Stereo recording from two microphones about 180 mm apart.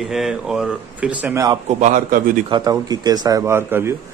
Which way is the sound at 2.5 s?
20° right (ahead or behind).